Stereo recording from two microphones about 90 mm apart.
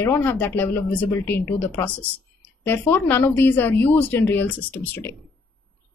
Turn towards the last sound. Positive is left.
turn(degrees=20)  # may be behind; listen again after turning